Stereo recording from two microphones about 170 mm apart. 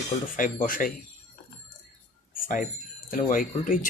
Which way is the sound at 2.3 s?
55° left (ahead or behind).